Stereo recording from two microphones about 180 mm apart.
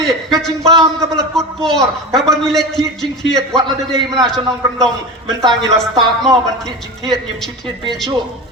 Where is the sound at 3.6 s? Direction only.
25° right (ahead or behind).